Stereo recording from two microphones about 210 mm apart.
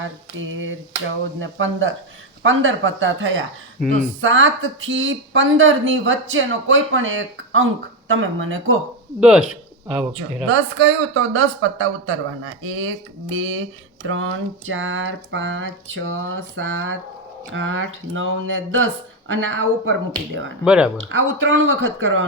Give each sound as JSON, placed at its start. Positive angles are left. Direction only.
{"t": 1.4, "sound": "speech", "side_deg": -65}
{"t": 9.2, "sound": "speech", "side_deg": 0}
{"t": 10.5, "sound": "speech", "side_deg": -65}
{"t": 20.7, "sound": "speech", "side_deg": -5}
{"t": 21.0, "sound": "speech", "side_deg": -65}